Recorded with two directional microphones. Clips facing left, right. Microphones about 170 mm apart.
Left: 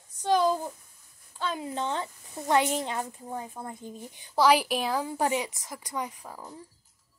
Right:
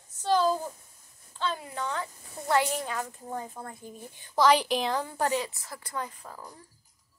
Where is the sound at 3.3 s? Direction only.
10° left (ahead or behind).